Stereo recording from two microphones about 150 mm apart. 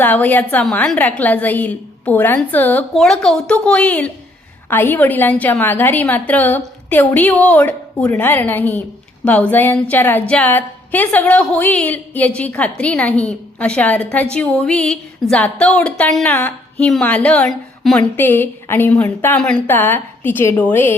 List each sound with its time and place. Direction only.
0.0 s a woman's voice: 10° left (ahead or behind)